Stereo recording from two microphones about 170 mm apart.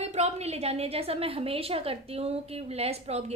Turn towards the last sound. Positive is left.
turn(degrees=-40)  # may be behind; listen again after turning